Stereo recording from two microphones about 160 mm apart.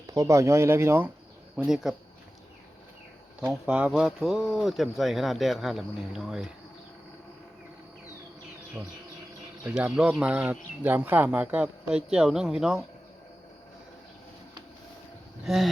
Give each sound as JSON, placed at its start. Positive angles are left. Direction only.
{"t": 0.1, "sound": "speech", "side_deg": -20}
{"t": 1.5, "sound": "speech", "side_deg": -5}
{"t": 3.4, "sound": "speech", "side_deg": -10}
{"t": 9.6, "sound": "speech", "side_deg": -5}
{"t": 15.4, "sound": "speech", "side_deg": 0}